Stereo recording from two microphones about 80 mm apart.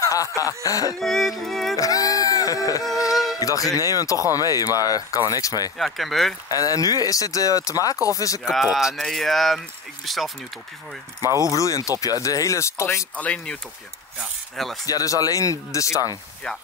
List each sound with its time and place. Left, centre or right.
0.0 s a sound: left
0.7 s speech: left
0.9 s speech: centre
1.8 s music: left
2.9 s speech: left
5.8 s speech: centre
6.5 s speech: left
8.7 s speech: centre
11.1 s speech: left
13.1 s speech: centre
14.9 s speech: left
16.4 s speech: centre